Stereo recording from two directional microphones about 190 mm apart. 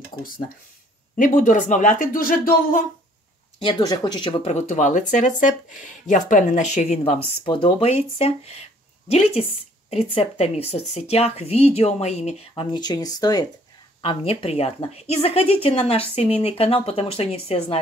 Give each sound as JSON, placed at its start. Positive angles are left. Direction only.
{"t": 1.1, "sound": "speech", "side_deg": 45}
{"t": 3.5, "sound": "a woman's voice", "side_deg": 25}